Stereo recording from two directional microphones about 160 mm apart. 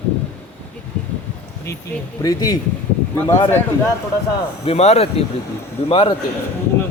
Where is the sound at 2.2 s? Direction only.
25° left (ahead or behind).